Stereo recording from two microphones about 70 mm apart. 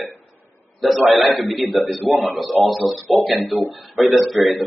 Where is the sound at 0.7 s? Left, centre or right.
Centre.